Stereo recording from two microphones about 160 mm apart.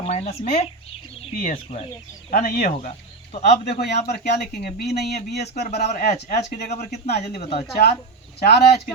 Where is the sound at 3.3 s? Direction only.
45° left (ahead or behind).